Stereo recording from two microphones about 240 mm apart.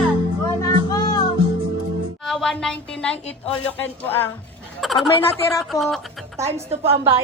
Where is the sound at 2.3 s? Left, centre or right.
Centre.